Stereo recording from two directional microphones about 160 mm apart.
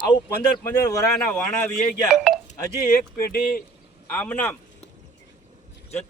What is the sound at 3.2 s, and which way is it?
Speech, 70° left (ahead or behind).